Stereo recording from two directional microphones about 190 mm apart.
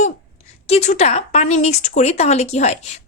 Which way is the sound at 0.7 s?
35° left (ahead or behind).